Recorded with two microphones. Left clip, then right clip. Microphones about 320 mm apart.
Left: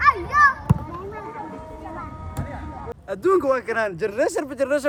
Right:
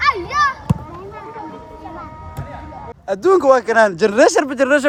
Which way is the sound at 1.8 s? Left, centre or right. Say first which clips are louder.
Right 3 dB; right.